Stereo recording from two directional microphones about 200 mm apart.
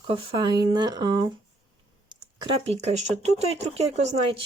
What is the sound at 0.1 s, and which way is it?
Speech, 25° right (ahead or behind).